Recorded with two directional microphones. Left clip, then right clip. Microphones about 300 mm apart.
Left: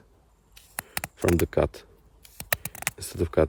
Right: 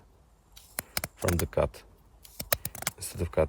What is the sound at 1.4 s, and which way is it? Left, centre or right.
Speech, left.